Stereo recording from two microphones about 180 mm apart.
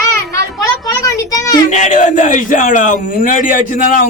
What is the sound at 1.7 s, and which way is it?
Speech, 40° left (ahead or behind).